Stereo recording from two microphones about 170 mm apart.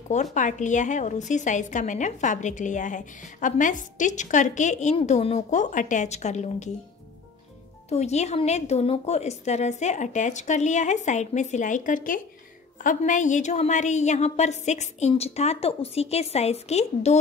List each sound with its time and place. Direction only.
0.1 s a woman's voice: 45° left (ahead or behind)
7.9 s a woman's voice: 40° left (ahead or behind)